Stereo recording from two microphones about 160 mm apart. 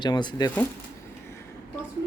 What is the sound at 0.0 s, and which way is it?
Speech, 30° left (ahead or behind).